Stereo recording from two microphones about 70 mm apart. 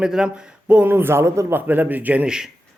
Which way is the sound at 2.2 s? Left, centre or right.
Centre.